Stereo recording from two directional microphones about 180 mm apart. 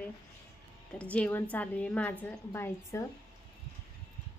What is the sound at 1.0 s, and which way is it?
A woman's voice, 5° left (ahead or behind).